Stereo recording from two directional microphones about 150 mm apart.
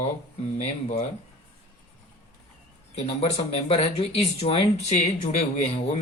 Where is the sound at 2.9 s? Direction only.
45° left (ahead or behind).